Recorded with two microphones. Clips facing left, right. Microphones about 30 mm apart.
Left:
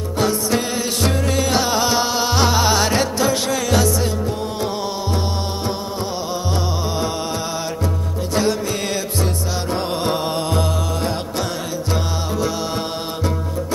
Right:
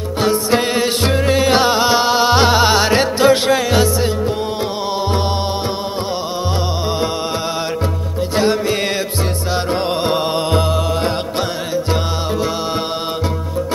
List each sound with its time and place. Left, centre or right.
0.2 s music: right
8.4 s music: right